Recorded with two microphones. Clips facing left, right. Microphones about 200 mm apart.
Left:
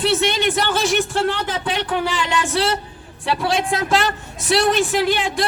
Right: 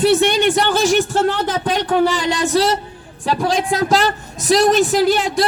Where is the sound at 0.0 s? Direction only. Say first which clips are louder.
Right 5 dB; 40° right (ahead or behind).